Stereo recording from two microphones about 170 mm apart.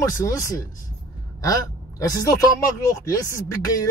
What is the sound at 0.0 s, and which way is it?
A man's voice, 20° left (ahead or behind).